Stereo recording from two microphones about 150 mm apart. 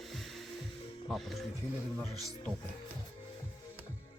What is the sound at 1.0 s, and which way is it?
Speech, centre (ahead or behind).